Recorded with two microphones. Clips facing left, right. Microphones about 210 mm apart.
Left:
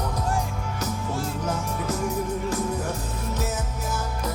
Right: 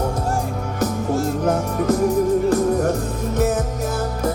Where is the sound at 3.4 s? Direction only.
60° right (ahead or behind).